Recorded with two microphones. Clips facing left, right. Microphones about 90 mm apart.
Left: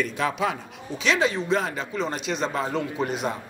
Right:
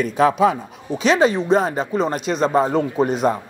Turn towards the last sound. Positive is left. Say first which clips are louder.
# right 8 dB
turn(degrees=-40)  # may be behind; listen again after turning